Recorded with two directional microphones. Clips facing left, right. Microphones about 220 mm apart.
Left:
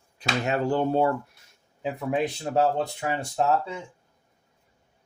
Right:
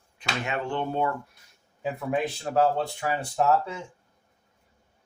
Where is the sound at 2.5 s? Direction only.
25° left (ahead or behind).